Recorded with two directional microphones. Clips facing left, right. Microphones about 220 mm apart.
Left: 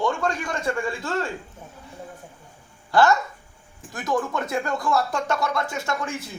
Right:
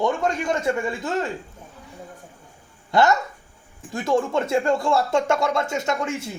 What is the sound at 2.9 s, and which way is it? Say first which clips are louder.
Speech: even; 20° right (ahead or behind).